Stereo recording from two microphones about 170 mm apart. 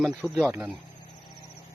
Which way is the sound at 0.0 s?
5° left (ahead or behind).